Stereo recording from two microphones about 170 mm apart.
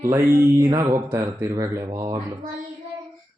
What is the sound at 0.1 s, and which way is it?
Speech, 20° right (ahead or behind).